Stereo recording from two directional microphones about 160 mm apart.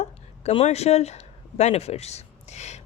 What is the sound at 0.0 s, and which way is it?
Speech, 45° left (ahead or behind).